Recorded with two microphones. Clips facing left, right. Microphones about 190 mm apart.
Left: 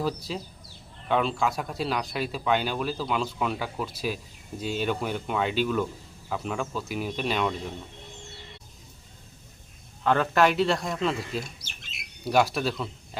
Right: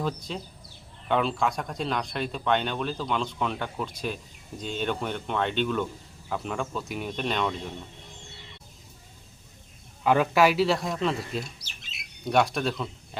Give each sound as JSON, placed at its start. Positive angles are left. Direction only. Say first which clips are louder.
{"t": 0.0, "sound": "speech", "louder": "left 1 dB", "side_deg": 5}
{"t": 10.0, "sound": "speech", "louder": "right 1 dB", "side_deg": -10}
{"t": 11.6, "sound": "squawk", "louder": "left 1 dB", "side_deg": 50}
{"t": 12.2, "sound": "speech", "louder": "even", "side_deg": 5}